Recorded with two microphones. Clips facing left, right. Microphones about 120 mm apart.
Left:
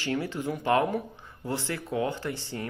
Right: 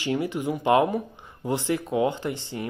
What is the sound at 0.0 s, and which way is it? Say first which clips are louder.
A man's voice: right 4 dB; 15° right (ahead or behind).